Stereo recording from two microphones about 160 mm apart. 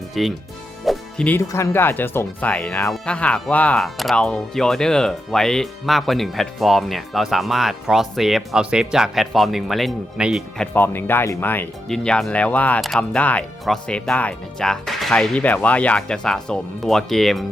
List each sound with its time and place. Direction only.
0.1 s speech: centre (ahead or behind)
10.8 s speech: 15° left (ahead or behind)